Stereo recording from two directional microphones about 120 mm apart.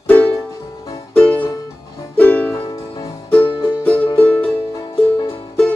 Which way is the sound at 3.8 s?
10° left (ahead or behind).